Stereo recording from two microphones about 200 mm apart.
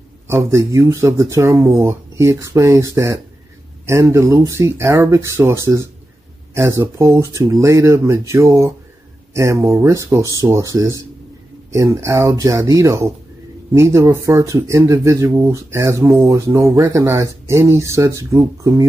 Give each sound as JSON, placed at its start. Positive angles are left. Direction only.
{"t": 0.4, "sound": "speech", "side_deg": -15}